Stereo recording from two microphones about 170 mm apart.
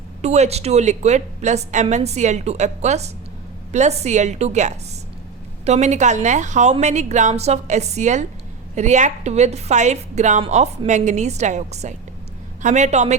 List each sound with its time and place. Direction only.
0.2 s a woman's voice: 40° right (ahead or behind)